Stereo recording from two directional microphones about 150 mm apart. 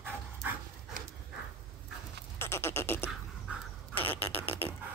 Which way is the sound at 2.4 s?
15° left (ahead or behind).